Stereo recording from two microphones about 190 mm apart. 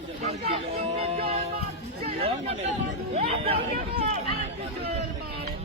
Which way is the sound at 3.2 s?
30° right (ahead or behind).